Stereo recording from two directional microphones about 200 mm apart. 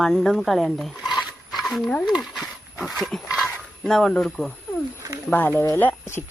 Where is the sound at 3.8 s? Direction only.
Centre (ahead or behind).